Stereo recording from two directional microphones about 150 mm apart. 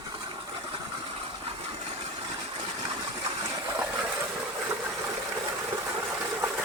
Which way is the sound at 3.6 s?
20° right (ahead or behind).